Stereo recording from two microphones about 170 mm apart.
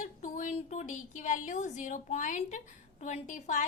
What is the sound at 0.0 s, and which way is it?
A woman's voice, 45° left (ahead or behind).